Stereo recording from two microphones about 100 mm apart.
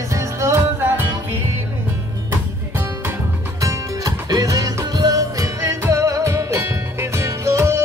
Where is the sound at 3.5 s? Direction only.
35° right (ahead or behind).